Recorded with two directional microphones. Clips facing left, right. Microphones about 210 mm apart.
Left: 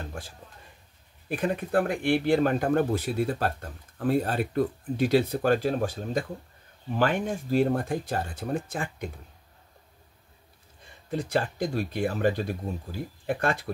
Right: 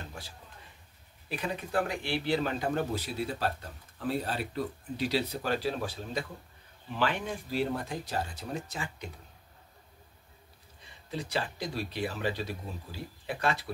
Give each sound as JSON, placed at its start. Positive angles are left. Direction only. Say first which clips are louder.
{"t": 0.2, "sound": "speech", "louder": "left 5 dB", "side_deg": 50}
{"t": 10.9, "sound": "speech", "louder": "left 7 dB", "side_deg": 50}